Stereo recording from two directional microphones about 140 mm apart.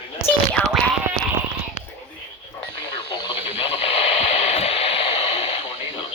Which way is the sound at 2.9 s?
40° left (ahead or behind).